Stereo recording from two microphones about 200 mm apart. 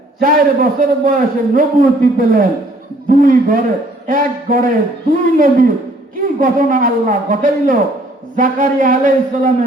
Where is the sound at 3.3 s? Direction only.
45° right (ahead or behind).